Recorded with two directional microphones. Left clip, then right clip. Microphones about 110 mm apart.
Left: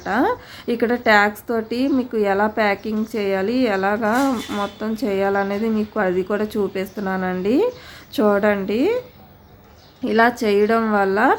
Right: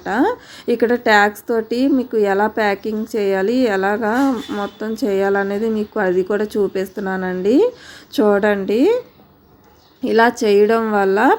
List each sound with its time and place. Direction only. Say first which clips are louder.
0.0 s a woman's voice: right 2 dB; 20° right (ahead or behind)
10.0 s a woman's voice: right 3 dB; 30° right (ahead or behind)